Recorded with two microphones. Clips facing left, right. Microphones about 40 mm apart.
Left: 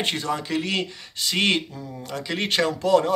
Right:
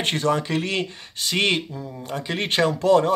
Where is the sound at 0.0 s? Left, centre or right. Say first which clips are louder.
Right 4 dB; right.